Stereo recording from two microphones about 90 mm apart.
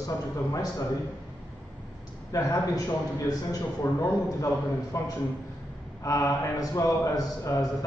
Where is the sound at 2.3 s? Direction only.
35° left (ahead or behind).